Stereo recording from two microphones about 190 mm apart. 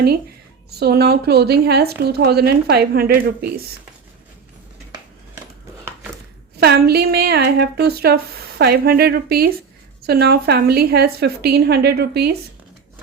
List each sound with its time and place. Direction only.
0.7 s speech: 55° right (ahead or behind)
6.6 s speech: 55° right (ahead or behind)